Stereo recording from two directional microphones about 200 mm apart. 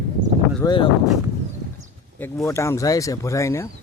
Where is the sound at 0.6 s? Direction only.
20° left (ahead or behind).